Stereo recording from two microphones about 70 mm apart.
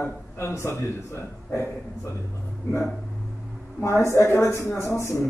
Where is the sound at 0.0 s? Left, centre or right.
Left.